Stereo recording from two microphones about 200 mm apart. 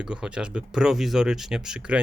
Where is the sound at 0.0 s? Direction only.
5° right (ahead or behind).